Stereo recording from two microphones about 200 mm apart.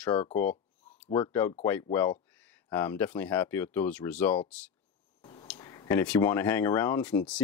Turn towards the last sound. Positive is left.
turn(degrees=5)  # may be behind; listen again after turning